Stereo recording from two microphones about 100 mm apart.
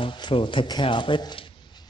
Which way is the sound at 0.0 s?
55° left (ahead or behind).